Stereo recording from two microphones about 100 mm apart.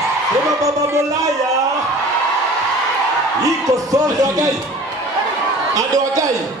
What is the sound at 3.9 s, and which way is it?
Speech, 35° right (ahead or behind).